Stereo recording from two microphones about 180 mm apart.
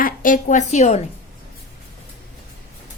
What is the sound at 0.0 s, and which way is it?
A woman's voice, 50° left (ahead or behind).